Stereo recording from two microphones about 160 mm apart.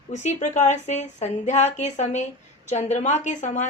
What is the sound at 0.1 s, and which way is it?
Speech, 45° left (ahead or behind).